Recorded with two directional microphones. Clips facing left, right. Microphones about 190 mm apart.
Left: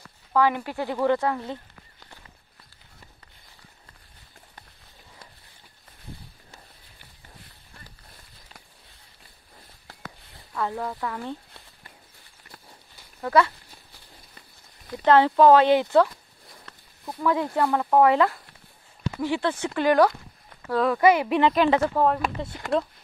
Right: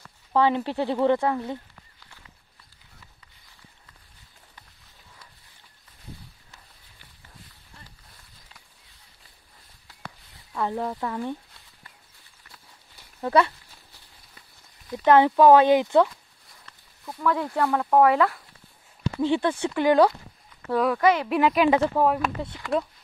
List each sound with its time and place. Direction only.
0.3 s speech: 25° right (ahead or behind)
10.5 s speech: 20° right (ahead or behind)
13.2 s speech: 20° right (ahead or behind)
15.0 s speech: 15° right (ahead or behind)
17.0 s speech: 10° left (ahead or behind)
19.2 s speech: 20° right (ahead or behind)
20.7 s speech: 5° right (ahead or behind)
21.0 s speech: 10° left (ahead or behind)
21.3 s speech: 10° right (ahead or behind)
22.0 s speech: 5° right (ahead or behind)